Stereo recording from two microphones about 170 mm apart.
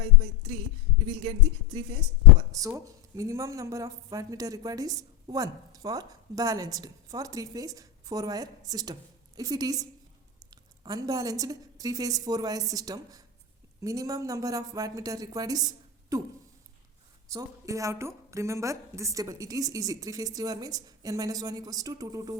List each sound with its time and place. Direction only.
1.2 s speech: 35° right (ahead or behind)
2.5 s a woman's voice: 20° right (ahead or behind)